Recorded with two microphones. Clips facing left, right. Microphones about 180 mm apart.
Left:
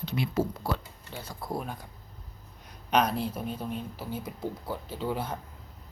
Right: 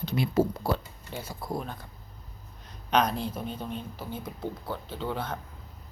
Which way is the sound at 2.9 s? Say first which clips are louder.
Even; 5° left (ahead or behind).